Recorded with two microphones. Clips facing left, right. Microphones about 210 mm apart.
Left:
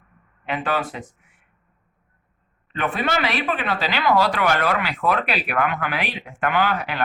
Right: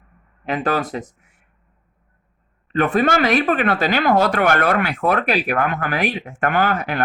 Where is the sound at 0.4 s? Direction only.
40° right (ahead or behind).